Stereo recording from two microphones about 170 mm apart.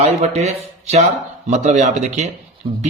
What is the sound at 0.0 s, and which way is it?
A man's voice, 40° right (ahead or behind).